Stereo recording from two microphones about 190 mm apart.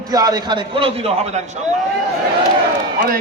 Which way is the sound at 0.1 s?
20° right (ahead or behind).